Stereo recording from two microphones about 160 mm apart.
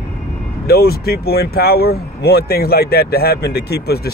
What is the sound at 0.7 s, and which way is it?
Speech, 80° left.